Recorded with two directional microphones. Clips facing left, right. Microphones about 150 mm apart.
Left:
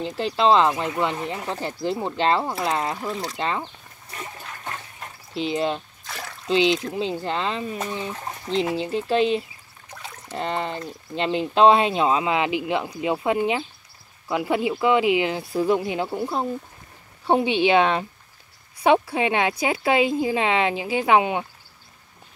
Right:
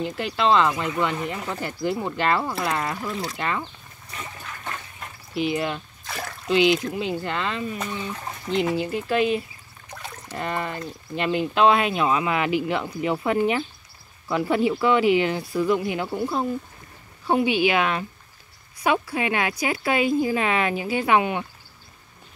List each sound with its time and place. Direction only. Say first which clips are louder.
0.0 s speech: left 2 dB; 30° left (ahead or behind)
4.1 s a sound: left 1 dB; 30° left (ahead or behind)
5.3 s speech: left 1 dB; 25° left (ahead or behind)
6.0 s a sound: right 5 dB; 5° right (ahead or behind)
6.5 s speech: right 1 dB; 25° left (ahead or behind)
15.5 s speech: left 2 dB; 30° left (ahead or behind)
16.1 s speech: right 1 dB; 15° left (ahead or behind)
17.3 s speech: left 2 dB; 25° left (ahead or behind)